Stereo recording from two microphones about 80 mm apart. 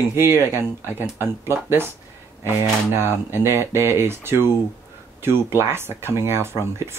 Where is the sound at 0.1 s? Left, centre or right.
Right.